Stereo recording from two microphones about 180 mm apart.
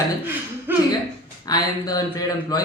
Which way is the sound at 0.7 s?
10° right (ahead or behind).